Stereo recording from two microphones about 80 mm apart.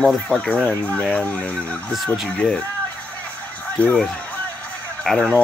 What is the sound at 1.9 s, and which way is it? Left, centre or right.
Speech, centre.